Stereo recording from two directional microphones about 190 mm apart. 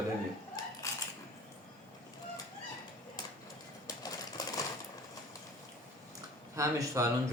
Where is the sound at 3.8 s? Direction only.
20° left (ahead or behind).